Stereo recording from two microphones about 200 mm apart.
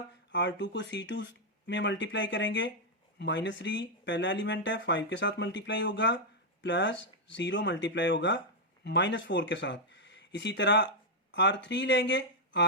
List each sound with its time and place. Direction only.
0.3 s speech: 65° left (ahead or behind)